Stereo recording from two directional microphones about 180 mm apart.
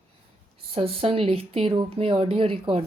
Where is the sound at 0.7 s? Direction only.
35° right (ahead or behind).